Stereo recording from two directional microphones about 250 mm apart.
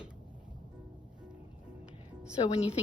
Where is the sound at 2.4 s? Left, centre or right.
Centre.